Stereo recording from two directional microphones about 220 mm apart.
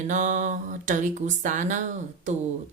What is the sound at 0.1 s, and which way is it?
Speech, 35° right (ahead or behind).